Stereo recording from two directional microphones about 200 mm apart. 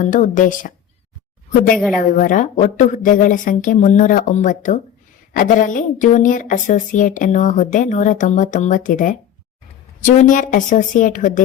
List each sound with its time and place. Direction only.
0.0 s a woman's voice: 40° left (ahead or behind)
1.7 s a woman's voice: 5° left (ahead or behind)
2.0 s a woman's voice: 40° left (ahead or behind)